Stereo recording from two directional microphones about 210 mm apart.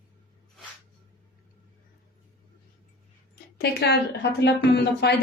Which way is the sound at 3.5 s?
50° left (ahead or behind).